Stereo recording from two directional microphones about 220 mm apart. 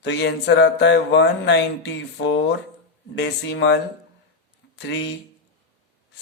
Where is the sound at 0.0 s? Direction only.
50° left (ahead or behind).